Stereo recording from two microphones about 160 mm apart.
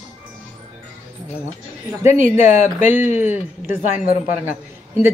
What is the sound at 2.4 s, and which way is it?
Speech, 50° left (ahead or behind).